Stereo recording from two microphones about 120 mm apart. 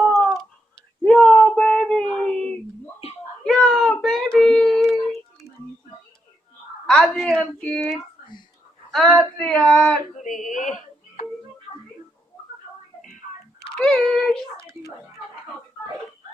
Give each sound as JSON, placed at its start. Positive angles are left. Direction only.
{"t": 1.0, "sound": "a sound", "side_deg": 10}
{"t": 3.4, "sound": "child singing", "side_deg": 10}
{"t": 6.8, "sound": "a child's voice", "side_deg": 5}
{"t": 10.2, "sound": "speech", "side_deg": 90}
{"t": 13.7, "sound": "a child's voice", "side_deg": 5}